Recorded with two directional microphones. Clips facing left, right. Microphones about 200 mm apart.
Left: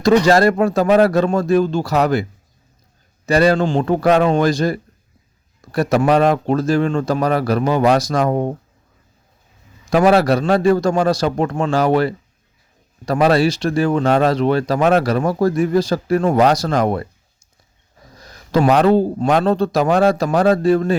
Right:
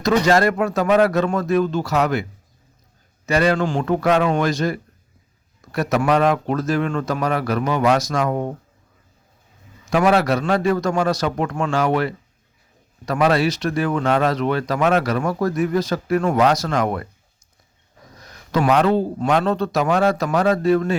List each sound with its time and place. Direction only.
0.0 s speech: 35° left (ahead or behind)
3.2 s speech: 35° left (ahead or behind)
9.8 s speech: 35° left (ahead or behind)
18.2 s speech: 30° left (ahead or behind)